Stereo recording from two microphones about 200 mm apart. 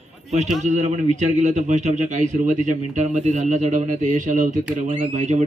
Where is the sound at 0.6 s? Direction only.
35° right (ahead or behind).